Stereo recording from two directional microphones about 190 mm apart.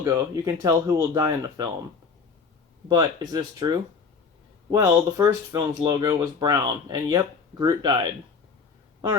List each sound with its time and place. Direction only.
0.0 s speech: 15° right (ahead or behind)
2.9 s speech: 20° right (ahead or behind)